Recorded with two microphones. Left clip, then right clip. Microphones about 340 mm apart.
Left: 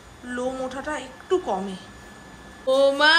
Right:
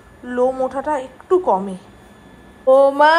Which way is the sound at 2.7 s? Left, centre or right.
Centre.